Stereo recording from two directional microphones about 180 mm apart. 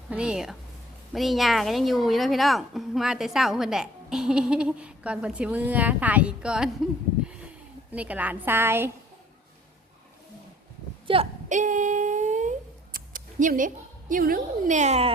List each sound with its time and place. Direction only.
0.1 s a woman's voice: 5° right (ahead or behind)
7.9 s a woman's voice: 10° right (ahead or behind)
11.0 s speech: 30° right (ahead or behind)
11.4 s humming: 45° right (ahead or behind)
14.1 s a woman's voice: 50° right (ahead or behind)